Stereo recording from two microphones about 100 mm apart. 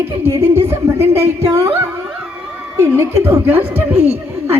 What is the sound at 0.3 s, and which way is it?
A woman's voice, 25° right (ahead or behind).